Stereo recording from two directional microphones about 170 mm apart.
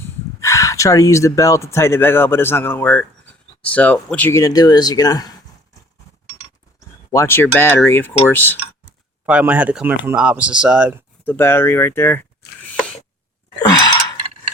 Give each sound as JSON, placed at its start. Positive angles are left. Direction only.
{"t": 0.3, "sound": "speech", "side_deg": 20}
{"t": 7.1, "sound": "speech", "side_deg": 15}
{"t": 9.2, "sound": "speech", "side_deg": -10}
{"t": 11.3, "sound": "speech", "side_deg": 15}
{"t": 13.6, "sound": "sigh", "side_deg": 25}